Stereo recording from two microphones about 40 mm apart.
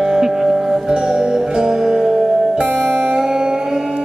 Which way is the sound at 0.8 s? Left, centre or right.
Right.